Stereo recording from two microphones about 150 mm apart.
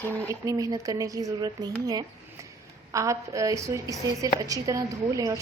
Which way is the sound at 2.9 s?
20° right (ahead or behind).